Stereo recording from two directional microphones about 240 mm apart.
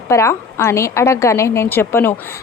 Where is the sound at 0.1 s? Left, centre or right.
Centre.